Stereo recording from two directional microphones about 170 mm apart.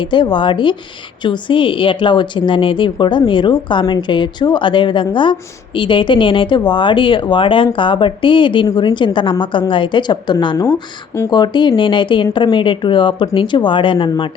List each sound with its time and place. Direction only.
0.0 s a woman's voice: 30° left (ahead or behind)
10.6 s speech: 15° left (ahead or behind)
11.3 s a woman's voice: 25° left (ahead or behind)